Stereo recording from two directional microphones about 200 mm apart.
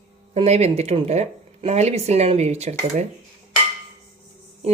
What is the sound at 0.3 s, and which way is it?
Speech, 30° right (ahead or behind).